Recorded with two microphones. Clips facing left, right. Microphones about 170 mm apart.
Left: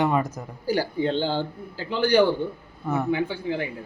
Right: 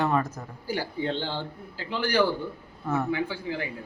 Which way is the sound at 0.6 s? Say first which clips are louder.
Left 6 dB; 35° left (ahead or behind).